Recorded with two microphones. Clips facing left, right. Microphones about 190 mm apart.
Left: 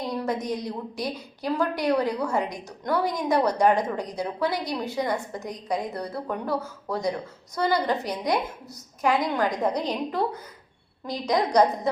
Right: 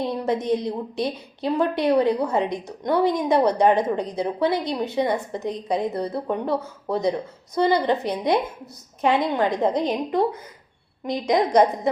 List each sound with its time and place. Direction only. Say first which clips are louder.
0.0 s a woman's voice: right 4 dB; 25° right (ahead or behind)